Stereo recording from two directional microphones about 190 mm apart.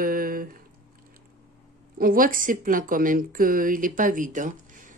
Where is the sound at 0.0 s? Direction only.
50° right (ahead or behind).